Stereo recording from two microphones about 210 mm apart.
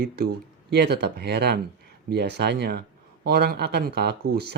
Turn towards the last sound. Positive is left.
turn(degrees=-50)  # may be behind; listen again after turning